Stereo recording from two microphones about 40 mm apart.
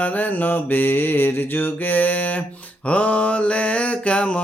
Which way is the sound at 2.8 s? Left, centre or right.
Left.